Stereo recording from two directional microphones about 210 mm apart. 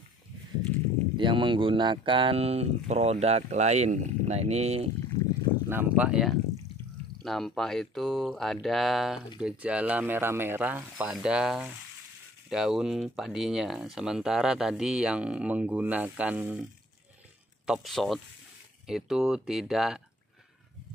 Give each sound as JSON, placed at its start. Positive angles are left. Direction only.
{"t": 1.1, "sound": "speech", "side_deg": -25}
{"t": 5.7, "sound": "speech", "side_deg": -10}
{"t": 17.6, "sound": "speech", "side_deg": 0}